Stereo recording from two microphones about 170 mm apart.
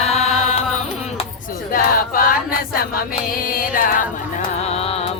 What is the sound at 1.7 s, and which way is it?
Music, 60° left (ahead or behind).